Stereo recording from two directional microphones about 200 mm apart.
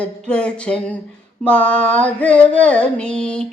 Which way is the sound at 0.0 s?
5° left (ahead or behind).